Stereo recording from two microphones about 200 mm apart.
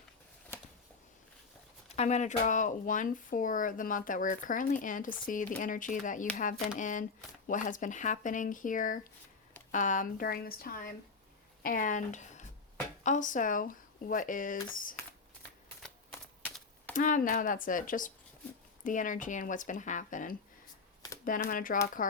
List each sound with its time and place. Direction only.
2.0 s speech: 35° left (ahead or behind)
15.8 s typewriter: 10° left (ahead or behind)
16.9 s speech: 40° left (ahead or behind)